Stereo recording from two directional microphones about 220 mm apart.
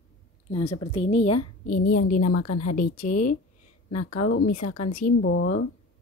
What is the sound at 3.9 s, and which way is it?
Speech, 80° left.